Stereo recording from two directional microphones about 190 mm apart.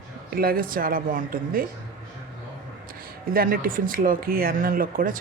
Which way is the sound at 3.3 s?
50° right (ahead or behind).